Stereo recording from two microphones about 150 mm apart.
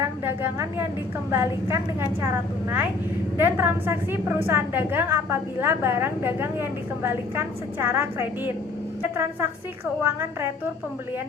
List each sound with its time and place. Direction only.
0.0 s a woman's voice: 15° right (ahead or behind)